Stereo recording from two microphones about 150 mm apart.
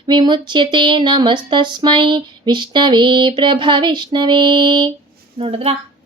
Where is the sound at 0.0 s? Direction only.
30° right (ahead or behind).